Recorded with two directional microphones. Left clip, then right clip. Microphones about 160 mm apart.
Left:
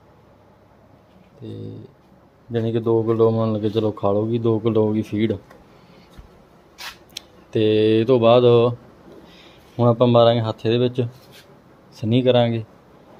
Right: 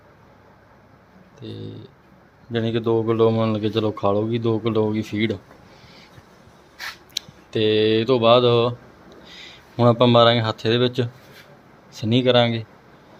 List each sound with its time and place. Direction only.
1.4 s speech: 15° left (ahead or behind)
7.1 s speech: 25° left (ahead or behind)
9.2 s speech: 15° left (ahead or behind)